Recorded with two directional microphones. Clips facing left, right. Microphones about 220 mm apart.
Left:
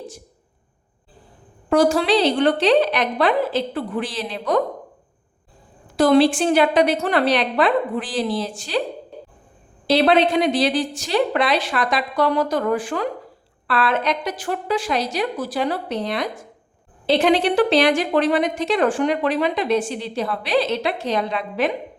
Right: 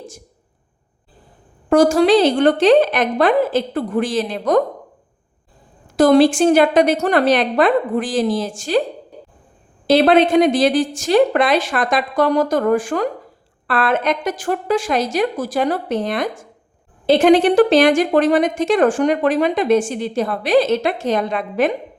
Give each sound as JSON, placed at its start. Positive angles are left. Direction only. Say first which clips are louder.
{"t": 1.7, "sound": "a woman's voice", "louder": "right 5 dB", "side_deg": -45}
{"t": 6.0, "sound": "a woman's voice", "louder": "right 4 dB", "side_deg": -45}
{"t": 9.8, "sound": "a woman's voice", "louder": "right 4 dB", "side_deg": -50}